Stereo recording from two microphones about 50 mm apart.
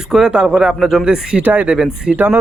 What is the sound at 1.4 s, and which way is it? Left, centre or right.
Speech, right.